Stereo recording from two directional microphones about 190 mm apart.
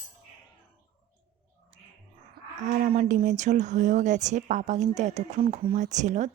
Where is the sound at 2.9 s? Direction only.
30° right (ahead or behind).